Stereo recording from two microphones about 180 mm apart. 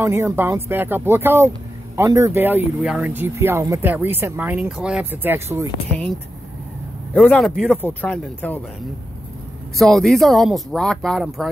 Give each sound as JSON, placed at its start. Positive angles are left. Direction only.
{"t": 0.0, "sound": "speech", "side_deg": -15}
{"t": 7.2, "sound": "speech", "side_deg": 0}
{"t": 9.8, "sound": "speech", "side_deg": 0}